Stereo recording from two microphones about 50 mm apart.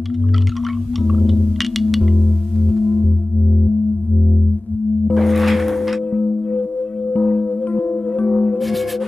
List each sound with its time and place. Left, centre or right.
1.0 s music: centre
5.1 s music: centre
6.1 s singing bowl: left
7.2 s music: left